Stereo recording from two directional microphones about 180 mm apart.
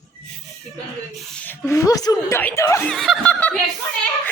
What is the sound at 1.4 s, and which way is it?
A woman's voice, 10° left (ahead or behind).